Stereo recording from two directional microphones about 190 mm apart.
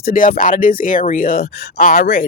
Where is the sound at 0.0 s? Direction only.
45° left (ahead or behind).